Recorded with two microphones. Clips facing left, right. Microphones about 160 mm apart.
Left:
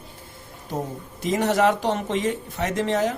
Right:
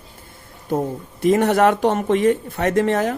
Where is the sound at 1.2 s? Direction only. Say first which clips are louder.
Right 5 dB; 55° right (ahead or behind).